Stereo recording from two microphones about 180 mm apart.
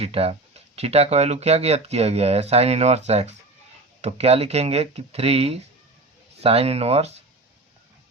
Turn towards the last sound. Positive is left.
turn(degrees=-35)  # may be behind; listen again after turning